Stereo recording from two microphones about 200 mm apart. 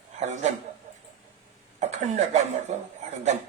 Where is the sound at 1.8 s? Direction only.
35° right (ahead or behind).